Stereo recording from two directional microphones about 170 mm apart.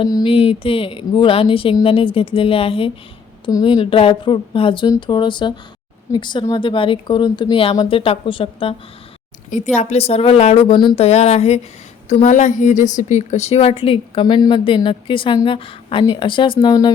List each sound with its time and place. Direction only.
0.0 s a woman's voice: 25° left (ahead or behind)
9.7 s a woman's voice: 40° left (ahead or behind)